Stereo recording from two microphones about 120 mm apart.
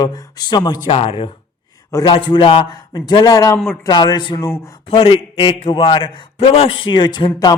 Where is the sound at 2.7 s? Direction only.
35° left (ahead or behind).